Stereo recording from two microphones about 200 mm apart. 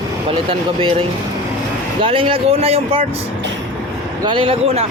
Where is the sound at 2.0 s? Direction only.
25° right (ahead or behind).